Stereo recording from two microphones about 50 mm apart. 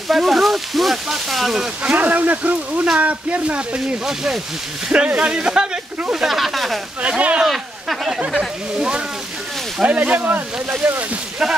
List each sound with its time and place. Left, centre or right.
0.1 s speech: centre
1.8 s speech: right
4.0 s speech: centre
4.8 s speech: right
6.1 s speech: centre
7.0 s speech: right
7.4 s a sound: centre
8.7 s speech: centre
9.8 s speech: right